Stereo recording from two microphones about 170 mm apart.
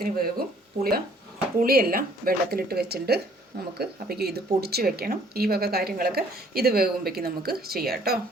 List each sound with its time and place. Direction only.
0.0 s speech: 60° right (ahead or behind)